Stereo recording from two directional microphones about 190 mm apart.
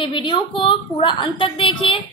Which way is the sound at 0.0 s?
25° left (ahead or behind).